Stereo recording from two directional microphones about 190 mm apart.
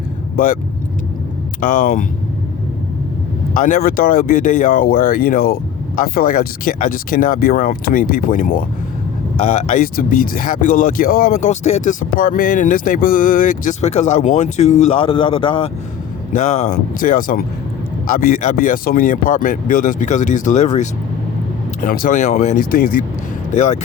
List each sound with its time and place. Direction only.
0.3 s speech: 45° left (ahead or behind)
1.6 s speech: 45° left (ahead or behind)
3.5 s speech: 45° left (ahead or behind); by 15.7 s 30° left (ahead or behind)
16.3 s speech: 40° left (ahead or behind)
23.6 s speech: 40° left (ahead or behind)